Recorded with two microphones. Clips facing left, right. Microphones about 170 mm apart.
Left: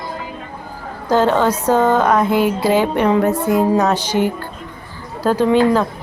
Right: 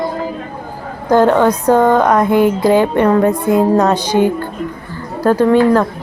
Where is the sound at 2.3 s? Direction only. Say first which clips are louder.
Right 4 dB; 55° right (ahead or behind).